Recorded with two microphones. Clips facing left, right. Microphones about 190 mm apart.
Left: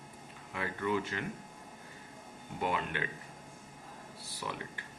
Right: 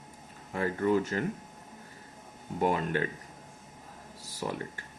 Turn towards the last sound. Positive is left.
turn(degrees=-40)  # may be behind; listen again after turning